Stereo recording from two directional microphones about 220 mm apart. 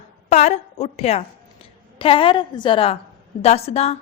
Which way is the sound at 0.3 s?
30° left (ahead or behind).